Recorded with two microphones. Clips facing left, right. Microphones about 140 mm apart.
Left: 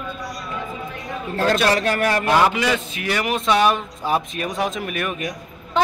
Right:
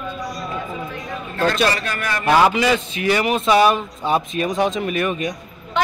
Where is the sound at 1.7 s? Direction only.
70° left (ahead or behind).